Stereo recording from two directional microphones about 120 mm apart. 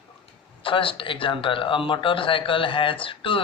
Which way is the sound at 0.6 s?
45° left (ahead or behind).